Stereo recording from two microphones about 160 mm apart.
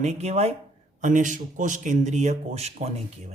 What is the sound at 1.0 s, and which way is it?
A man's voice, 50° right (ahead or behind).